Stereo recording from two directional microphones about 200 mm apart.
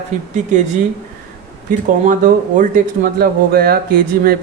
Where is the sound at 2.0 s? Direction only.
40° right (ahead or behind).